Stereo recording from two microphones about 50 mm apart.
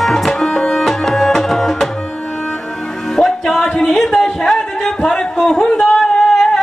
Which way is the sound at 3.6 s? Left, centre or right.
Centre.